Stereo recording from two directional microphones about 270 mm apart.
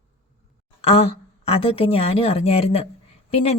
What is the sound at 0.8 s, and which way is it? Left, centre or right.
A woman's voice, left.